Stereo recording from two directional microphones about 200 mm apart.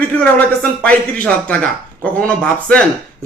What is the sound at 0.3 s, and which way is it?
A man's voice, 5° left (ahead or behind).